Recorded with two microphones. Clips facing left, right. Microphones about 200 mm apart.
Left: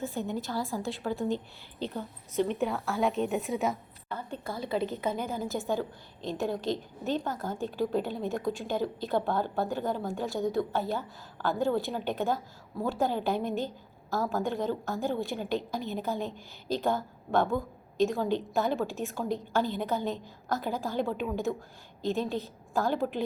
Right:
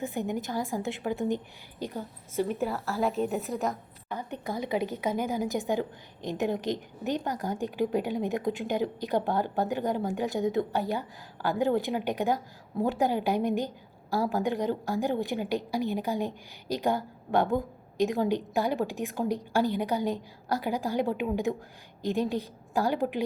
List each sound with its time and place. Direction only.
0.0 s a woman's voice: 15° right (ahead or behind); by 3.8 s centre (ahead or behind)
4.1 s a woman's voice: 15° right (ahead or behind)